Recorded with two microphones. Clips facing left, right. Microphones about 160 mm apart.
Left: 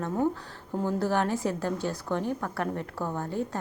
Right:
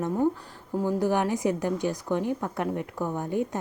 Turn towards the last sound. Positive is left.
turn(degrees=-15)  # may be behind; listen again after turning